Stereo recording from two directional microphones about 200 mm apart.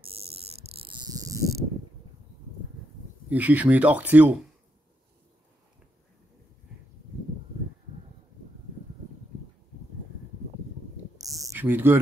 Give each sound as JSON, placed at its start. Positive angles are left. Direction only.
{"t": 0.0, "sound": "cricket", "side_deg": -30}
{"t": 3.3, "sound": "speech", "side_deg": -10}
{"t": 11.1, "sound": "a sound", "side_deg": -15}